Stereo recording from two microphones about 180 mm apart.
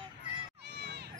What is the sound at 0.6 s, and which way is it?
Crowd, 65° right (ahead or behind).